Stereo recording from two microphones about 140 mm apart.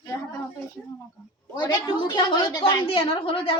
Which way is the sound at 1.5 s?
30° left (ahead or behind).